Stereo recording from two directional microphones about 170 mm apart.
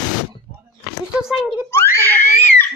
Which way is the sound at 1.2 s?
5° right (ahead or behind).